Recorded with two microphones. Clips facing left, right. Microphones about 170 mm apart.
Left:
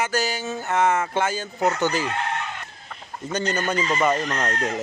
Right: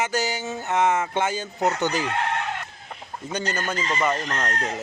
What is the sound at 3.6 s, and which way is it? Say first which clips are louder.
Speech: left 4 dB; 15° left (ahead or behind).